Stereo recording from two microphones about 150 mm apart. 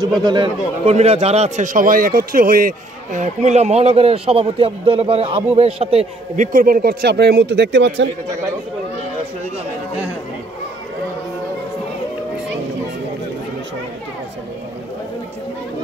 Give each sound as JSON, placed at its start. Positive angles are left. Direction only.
{"t": 0.0, "sound": "a man's voice", "side_deg": -30}
{"t": 0.8, "sound": "a man's voice", "side_deg": -45}
{"t": 6.3, "sound": "speech", "side_deg": -60}